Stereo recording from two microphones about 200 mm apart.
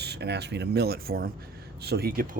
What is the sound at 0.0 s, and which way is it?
Speech, 55° right (ahead or behind).